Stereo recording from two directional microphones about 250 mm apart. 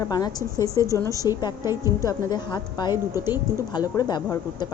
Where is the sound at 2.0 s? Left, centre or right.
Centre.